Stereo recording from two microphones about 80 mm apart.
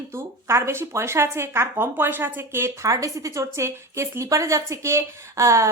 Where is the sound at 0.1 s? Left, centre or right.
Right.